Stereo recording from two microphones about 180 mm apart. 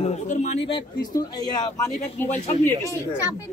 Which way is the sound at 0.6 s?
25° left (ahead or behind).